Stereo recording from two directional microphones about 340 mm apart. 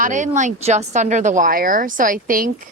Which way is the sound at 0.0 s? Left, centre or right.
Right.